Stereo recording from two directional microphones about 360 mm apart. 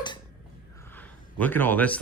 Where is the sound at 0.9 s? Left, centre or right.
Centre.